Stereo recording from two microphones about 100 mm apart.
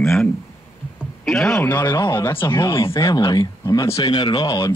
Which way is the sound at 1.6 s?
20° left (ahead or behind).